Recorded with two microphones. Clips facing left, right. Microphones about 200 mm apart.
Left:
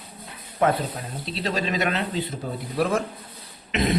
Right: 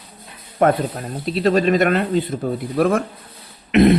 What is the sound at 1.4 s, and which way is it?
A man's voice, 55° right (ahead or behind).